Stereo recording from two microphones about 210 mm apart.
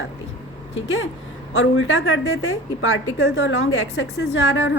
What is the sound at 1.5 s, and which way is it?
A woman's voice, 75° left (ahead or behind).